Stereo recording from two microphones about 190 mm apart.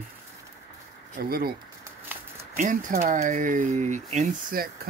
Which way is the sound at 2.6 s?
40° right (ahead or behind).